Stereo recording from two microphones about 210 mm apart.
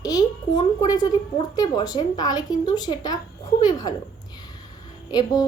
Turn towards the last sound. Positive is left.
turn(degrees=20)  # may be behind; listen again after turning